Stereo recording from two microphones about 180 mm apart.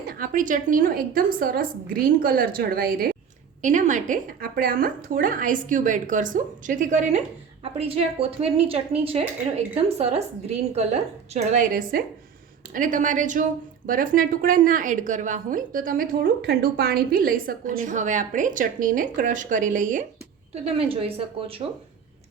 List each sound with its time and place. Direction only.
0.1 s a woman's voice: 50° right (ahead or behind)
3.6 s a woman's voice: 45° right (ahead or behind)
20.7 s a woman's voice: 30° right (ahead or behind)